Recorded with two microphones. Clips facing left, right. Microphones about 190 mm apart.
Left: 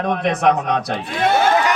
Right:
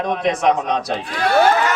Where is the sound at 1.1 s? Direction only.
25° left (ahead or behind).